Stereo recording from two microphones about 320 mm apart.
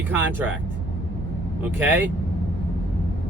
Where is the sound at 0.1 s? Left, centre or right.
Centre.